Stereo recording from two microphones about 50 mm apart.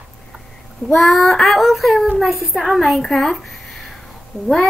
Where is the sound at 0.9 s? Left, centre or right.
Centre.